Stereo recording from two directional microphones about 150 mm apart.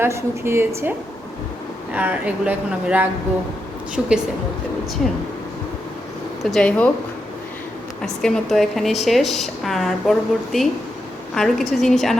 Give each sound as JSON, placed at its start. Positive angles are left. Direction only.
{"t": 0.0, "sound": "speech", "side_deg": -15}
{"t": 4.0, "sound": "a woman's voice", "side_deg": 0}
{"t": 6.4, "sound": "speech", "side_deg": 5}
{"t": 8.0, "sound": "a woman's voice", "side_deg": 5}